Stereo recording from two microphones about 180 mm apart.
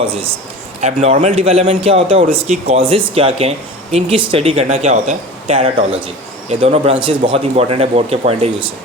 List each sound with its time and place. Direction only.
0.8 s speech: 40° right (ahead or behind)